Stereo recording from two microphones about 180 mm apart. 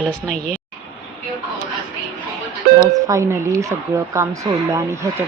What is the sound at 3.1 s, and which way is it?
Speech, 20° right (ahead or behind).